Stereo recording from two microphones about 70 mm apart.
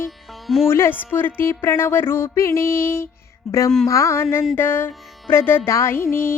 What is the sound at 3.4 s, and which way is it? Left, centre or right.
Speech, centre.